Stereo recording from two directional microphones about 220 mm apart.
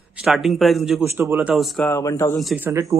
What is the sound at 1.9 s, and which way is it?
Speech, 15° left (ahead or behind).